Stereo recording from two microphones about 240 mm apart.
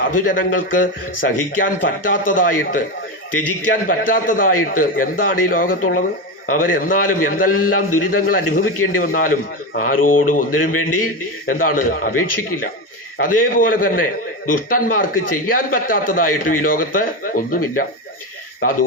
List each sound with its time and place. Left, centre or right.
0.1 s a man's voice: left
3.8 s a man's voice: left
13.1 s a man's voice: left